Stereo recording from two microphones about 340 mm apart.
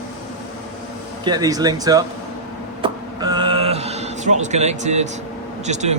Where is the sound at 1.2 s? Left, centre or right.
Centre.